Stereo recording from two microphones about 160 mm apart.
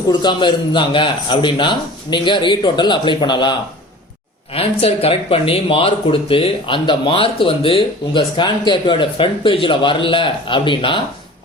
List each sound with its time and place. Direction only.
0.1 s a man's voice: 30° left (ahead or behind)
4.5 s speech: 35° left (ahead or behind)